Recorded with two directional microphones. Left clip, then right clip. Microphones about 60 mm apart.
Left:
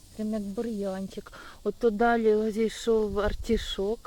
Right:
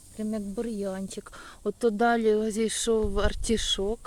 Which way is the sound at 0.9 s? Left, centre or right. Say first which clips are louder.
Even; right.